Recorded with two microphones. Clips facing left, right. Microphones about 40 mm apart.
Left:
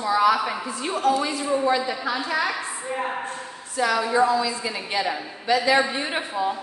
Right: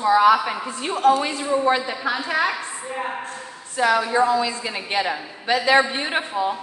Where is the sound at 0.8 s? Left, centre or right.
Right.